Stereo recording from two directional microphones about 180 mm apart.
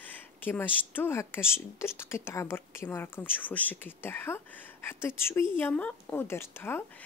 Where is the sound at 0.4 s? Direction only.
10° left (ahead or behind).